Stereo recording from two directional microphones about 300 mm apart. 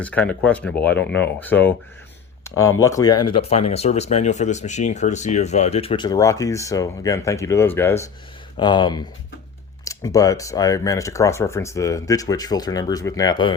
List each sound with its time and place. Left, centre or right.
0.0 s speech: centre
2.6 s speech: left
2.8 s speech: centre